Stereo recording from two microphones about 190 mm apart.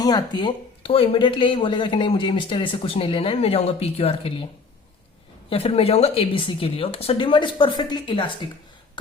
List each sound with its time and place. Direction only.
0.0 s speech: 20° left (ahead or behind)
5.5 s speech: 30° left (ahead or behind)